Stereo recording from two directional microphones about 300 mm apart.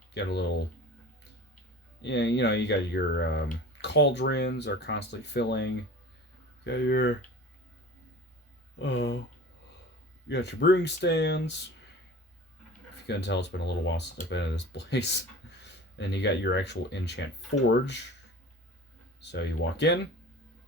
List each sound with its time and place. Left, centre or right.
2.0 s speech: left
6.7 s speech: left
8.8 s speech: left
10.2 s speech: left
13.1 s speech: left
19.2 s speech: left